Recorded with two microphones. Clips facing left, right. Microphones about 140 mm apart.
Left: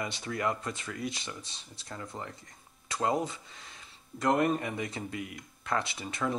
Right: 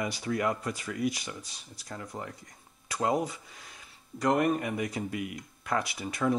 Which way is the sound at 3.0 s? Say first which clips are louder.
Right 1 dB; 20° right (ahead or behind).